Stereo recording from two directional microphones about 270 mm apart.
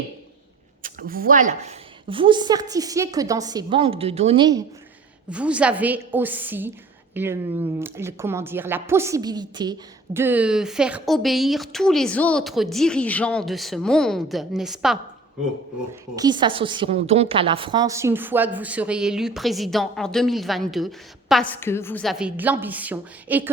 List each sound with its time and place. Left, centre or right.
0.8 s a woman's voice: right
5.3 s a woman's voice: centre
16.1 s a woman's voice: centre